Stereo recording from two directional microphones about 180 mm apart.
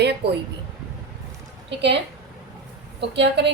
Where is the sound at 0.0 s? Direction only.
65° right (ahead or behind).